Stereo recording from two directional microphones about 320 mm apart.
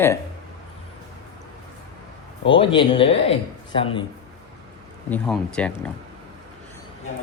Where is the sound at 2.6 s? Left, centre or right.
Centre.